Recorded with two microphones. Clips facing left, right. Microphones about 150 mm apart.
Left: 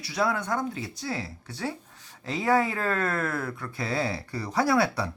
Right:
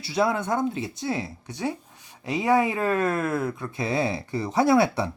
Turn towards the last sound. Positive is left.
turn(degrees=-20)  # may be behind; listen again after turning